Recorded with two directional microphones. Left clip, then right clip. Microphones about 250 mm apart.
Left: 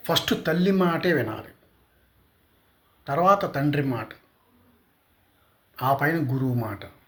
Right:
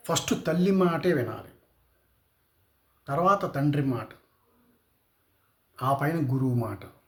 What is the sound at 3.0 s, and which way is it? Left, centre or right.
A man's voice, centre.